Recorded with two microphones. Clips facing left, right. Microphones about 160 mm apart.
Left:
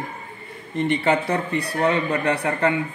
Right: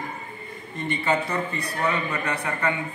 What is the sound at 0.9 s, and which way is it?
Speech, 65° left (ahead or behind).